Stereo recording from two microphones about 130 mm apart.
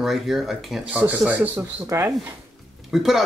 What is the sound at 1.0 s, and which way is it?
Speech, 10° right (ahead or behind).